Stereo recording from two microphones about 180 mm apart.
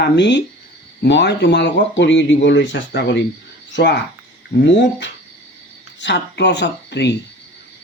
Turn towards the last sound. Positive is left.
turn(degrees=70)  # may be behind; listen again after turning